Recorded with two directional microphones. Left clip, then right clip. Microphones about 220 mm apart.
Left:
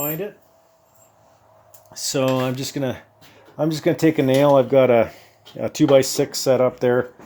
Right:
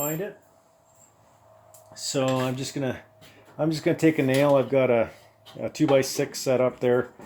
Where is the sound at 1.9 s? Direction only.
40° left (ahead or behind).